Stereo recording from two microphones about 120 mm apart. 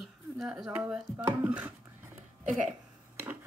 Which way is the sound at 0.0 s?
Centre (ahead or behind).